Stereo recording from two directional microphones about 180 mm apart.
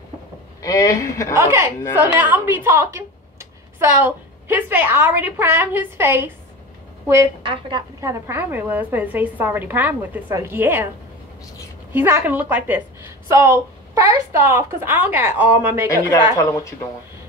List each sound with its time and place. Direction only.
0.6 s speech: 20° left (ahead or behind)
1.3 s a woman's voice: 15° right (ahead or behind)
7.4 s a woman's voice: 30° right (ahead or behind)
8.0 s a woman's voice: 15° right (ahead or behind)
11.9 s a woman's voice: 10° right (ahead or behind)
16.3 s speech: 20° left (ahead or behind)